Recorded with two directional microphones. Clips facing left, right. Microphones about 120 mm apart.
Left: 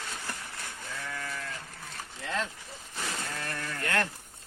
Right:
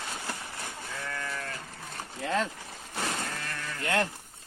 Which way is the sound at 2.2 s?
45° right (ahead or behind).